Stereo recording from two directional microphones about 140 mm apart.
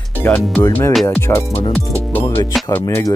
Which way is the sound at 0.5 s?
15° left (ahead or behind).